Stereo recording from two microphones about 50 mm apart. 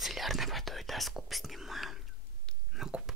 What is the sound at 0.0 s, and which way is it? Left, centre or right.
Whispering, centre.